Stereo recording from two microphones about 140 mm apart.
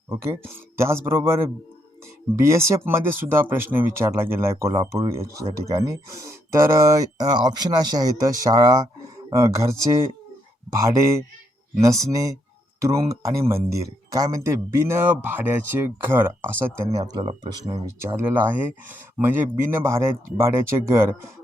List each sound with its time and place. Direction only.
0.1 s speech: 20° right (ahead or behind)
18.0 s speech: 15° right (ahead or behind)